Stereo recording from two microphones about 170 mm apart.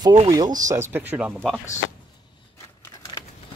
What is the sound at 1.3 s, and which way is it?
Speech, 5° left (ahead or behind).